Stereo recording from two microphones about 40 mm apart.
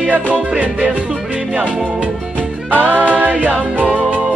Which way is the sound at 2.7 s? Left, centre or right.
Right.